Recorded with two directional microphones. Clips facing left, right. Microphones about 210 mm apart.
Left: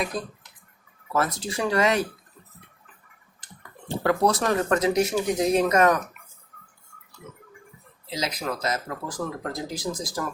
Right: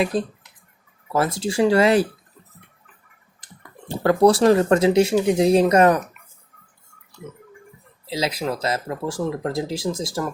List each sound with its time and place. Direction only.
0.0 s speech: 30° right (ahead or behind)
4.1 s speech: 30° right (ahead or behind)
8.1 s speech: 30° right (ahead or behind)